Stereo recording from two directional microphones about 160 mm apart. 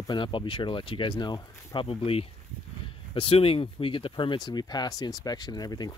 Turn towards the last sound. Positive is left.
turn(degrees=25)  # may be behind; listen again after turning